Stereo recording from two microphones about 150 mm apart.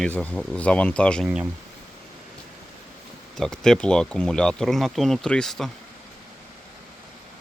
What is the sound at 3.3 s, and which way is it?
Speech, 5° left (ahead or behind).